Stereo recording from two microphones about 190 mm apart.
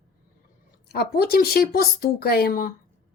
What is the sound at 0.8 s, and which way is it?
Speech, 55° left (ahead or behind).